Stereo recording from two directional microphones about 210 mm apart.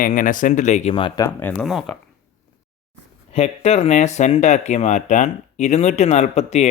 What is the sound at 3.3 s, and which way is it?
Speech, 30° left (ahead or behind).